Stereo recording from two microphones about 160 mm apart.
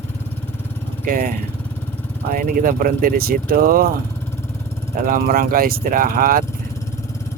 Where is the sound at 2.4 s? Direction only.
60° right (ahead or behind).